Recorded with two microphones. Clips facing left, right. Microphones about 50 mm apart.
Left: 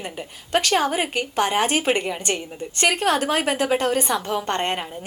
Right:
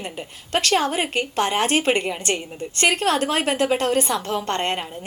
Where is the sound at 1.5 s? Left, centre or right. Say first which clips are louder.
Right 2 dB; centre.